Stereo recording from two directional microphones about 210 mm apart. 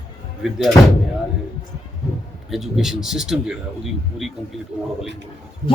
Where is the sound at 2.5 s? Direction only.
Centre (ahead or behind).